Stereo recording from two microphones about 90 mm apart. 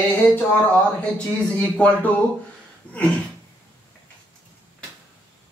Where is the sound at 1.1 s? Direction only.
10° left (ahead or behind).